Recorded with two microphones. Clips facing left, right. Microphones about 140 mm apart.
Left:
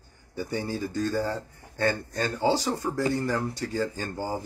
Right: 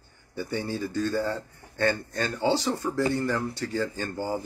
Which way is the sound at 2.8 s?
15° left (ahead or behind).